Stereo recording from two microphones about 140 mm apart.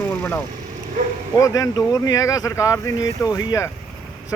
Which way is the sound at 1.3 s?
25° left (ahead or behind).